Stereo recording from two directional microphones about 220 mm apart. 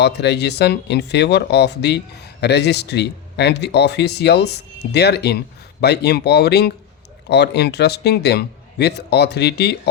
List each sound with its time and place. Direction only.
0.0 s speech: 50° left (ahead or behind)